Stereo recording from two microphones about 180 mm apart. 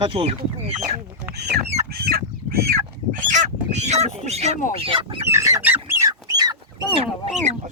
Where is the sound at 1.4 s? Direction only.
65° right (ahead or behind).